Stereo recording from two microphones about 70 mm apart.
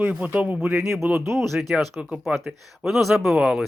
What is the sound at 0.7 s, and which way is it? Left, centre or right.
Speech, centre.